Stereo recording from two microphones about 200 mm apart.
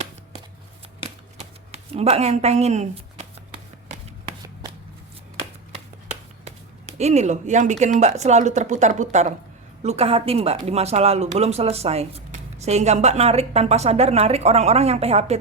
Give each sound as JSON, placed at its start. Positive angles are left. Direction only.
{"t": 1.7, "sound": "speech", "side_deg": -30}
{"t": 6.4, "sound": "speech", "side_deg": -35}